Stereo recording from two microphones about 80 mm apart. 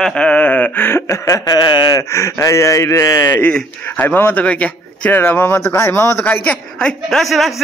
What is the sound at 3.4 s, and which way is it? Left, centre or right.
Speech, centre.